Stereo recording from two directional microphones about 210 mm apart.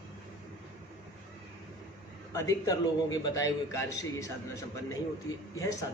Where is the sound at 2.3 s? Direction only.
15° left (ahead or behind).